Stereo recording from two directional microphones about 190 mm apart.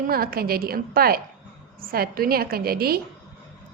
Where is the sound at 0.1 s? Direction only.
50° right (ahead or behind).